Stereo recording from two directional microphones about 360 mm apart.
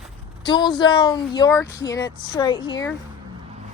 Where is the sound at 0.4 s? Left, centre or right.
Centre.